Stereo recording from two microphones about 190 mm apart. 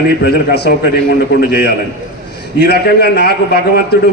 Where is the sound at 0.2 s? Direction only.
60° left (ahead or behind).